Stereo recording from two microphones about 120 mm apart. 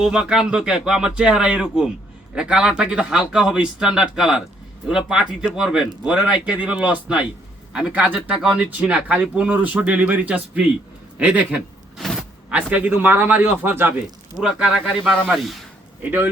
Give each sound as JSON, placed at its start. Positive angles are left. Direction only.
{"t": 0.0, "sound": "speech", "side_deg": -5}
{"t": 14.3, "sound": "speech", "side_deg": -5}
{"t": 16.0, "sound": "speech", "side_deg": -15}